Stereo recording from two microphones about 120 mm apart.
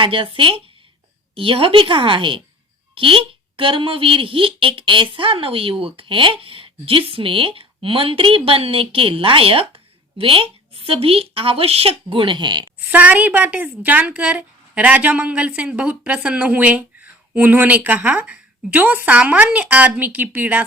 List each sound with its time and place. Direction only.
0.0 s speech: 45° right (ahead or behind)
12.9 s a woman's voice: 10° right (ahead or behind)